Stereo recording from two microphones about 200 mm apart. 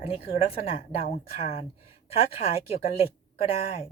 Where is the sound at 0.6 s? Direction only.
30° left (ahead or behind).